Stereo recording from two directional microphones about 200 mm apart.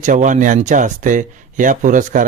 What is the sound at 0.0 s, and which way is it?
Speech, 40° right (ahead or behind).